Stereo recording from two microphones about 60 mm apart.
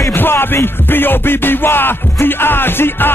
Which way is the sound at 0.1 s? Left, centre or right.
Left.